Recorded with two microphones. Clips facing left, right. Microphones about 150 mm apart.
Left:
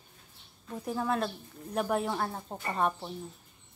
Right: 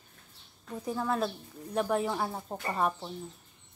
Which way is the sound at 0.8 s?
Centre (ahead or behind).